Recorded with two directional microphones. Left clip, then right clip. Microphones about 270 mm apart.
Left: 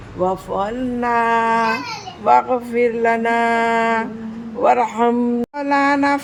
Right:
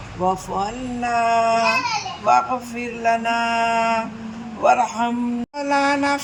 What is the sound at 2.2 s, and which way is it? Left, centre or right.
A woman's voice, centre.